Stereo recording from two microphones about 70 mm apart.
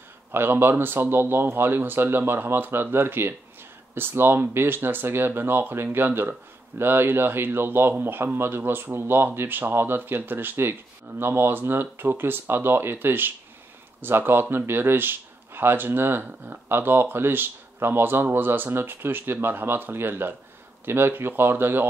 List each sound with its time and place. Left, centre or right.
0.3 s speech: right